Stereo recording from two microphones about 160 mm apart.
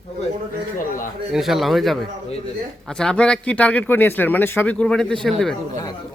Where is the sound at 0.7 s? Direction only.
55° left (ahead or behind).